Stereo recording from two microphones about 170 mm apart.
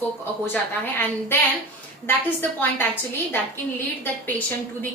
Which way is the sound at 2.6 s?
10° left (ahead or behind).